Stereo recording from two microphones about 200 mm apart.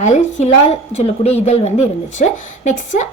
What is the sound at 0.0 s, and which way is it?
A woman's voice, 35° left (ahead or behind).